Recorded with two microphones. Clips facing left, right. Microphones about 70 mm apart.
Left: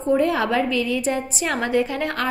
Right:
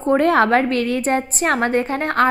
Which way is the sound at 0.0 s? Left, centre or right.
Right.